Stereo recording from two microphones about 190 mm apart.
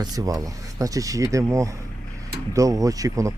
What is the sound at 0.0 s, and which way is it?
Speech, 20° right (ahead or behind).